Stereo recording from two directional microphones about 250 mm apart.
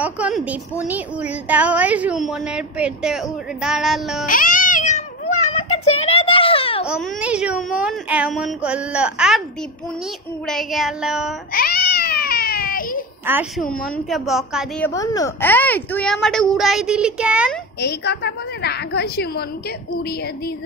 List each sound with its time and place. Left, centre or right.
0.0 s a woman's voice: centre
4.3 s cat: left
6.9 s a woman's voice: centre
10.4 s a woman's voice: centre
11.5 s a sound: left
13.2 s a woman's voice: centre
13.7 s a woman's voice: centre
14.9 s a woman's voice: centre
17.7 s a woman's voice: left